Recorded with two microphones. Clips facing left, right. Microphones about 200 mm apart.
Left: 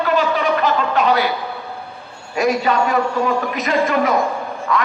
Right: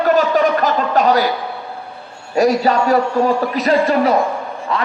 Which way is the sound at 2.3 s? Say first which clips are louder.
Right 3 dB; 35° right (ahead or behind).